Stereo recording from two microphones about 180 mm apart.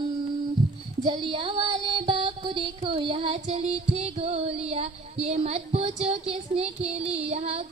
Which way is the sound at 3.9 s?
35° right (ahead or behind).